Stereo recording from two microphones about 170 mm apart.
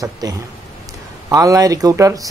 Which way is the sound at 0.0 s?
20° right (ahead or behind).